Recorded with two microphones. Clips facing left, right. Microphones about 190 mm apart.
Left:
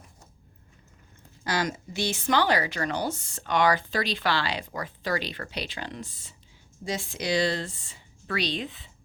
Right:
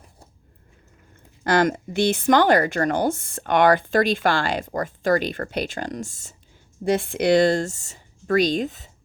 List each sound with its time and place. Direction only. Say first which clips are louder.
1.5 s speech: right 9 dB; 55° right (ahead or behind)
6.8 s speech: right 11 dB; 60° right (ahead or behind); by 8.9 s 45° right (ahead or behind)